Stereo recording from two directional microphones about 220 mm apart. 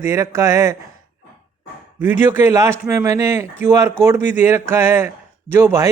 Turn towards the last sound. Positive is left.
turn(degrees=-10)  # may be behind; listen again after turning